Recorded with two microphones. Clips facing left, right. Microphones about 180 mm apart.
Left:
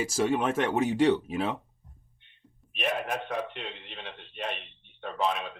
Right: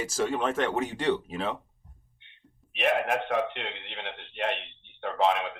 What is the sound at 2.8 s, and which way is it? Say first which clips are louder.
A man's voice: right 5 dB; 85° right.